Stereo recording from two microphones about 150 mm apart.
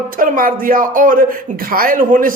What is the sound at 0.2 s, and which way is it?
A man's voice, 70° right (ahead or behind).